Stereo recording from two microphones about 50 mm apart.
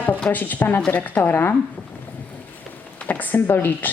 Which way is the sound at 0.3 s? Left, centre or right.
Left.